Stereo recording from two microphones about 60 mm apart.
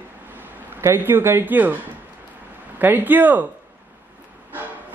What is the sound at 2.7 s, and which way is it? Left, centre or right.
Speech, right.